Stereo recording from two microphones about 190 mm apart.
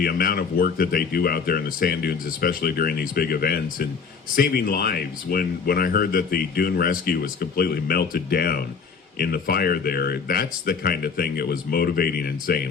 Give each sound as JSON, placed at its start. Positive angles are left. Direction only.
{"t": 0.0, "sound": "speech", "side_deg": 50}